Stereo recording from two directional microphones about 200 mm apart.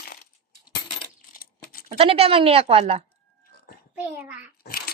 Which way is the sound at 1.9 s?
30° right (ahead or behind).